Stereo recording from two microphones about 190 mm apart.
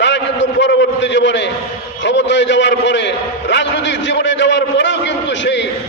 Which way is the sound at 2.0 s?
70° left (ahead or behind).